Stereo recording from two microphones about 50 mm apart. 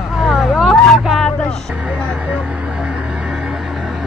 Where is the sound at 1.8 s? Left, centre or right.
Right.